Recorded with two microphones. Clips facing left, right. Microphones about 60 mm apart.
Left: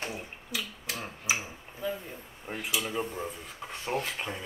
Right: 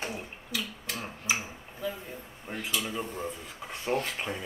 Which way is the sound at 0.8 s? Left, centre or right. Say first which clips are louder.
Even; centre.